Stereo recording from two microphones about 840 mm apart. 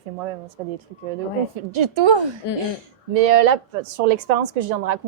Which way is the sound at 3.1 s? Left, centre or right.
Right.